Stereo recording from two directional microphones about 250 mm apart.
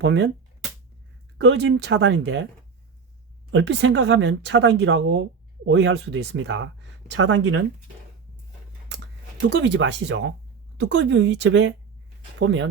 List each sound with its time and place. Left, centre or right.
0.0 s speech: right
1.4 s speech: right
3.5 s speech: right
9.4 s speech: right